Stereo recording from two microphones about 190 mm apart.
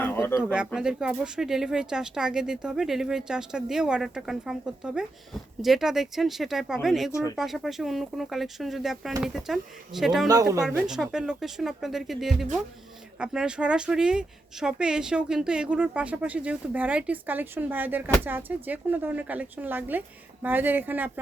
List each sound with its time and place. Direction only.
0.0 s a sound: 10° left (ahead or behind)
0.5 s speech: 5° right (ahead or behind)
7.1 s speech: 15° left (ahead or behind)
7.3 s speech: centre (ahead or behind)
10.2 s speech: 20° right (ahead or behind)
10.8 s speech: centre (ahead or behind)